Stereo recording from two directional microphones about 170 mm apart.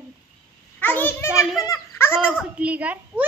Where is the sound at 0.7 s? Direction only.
10° left (ahead or behind).